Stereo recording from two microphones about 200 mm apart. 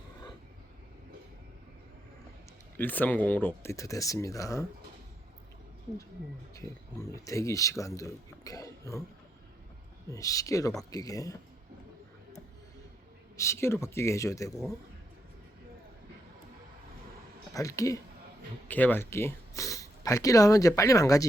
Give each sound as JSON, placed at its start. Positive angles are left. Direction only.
{"t": 2.7, "sound": "speech", "side_deg": 10}
{"t": 7.3, "sound": "speech", "side_deg": 15}
{"t": 10.1, "sound": "speech", "side_deg": 15}
{"t": 13.3, "sound": "speech", "side_deg": 15}
{"t": 17.5, "sound": "speech", "side_deg": 15}